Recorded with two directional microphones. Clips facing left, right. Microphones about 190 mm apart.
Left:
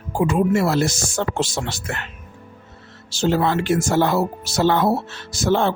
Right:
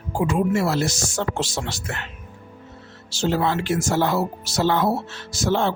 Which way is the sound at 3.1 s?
55° left (ahead or behind).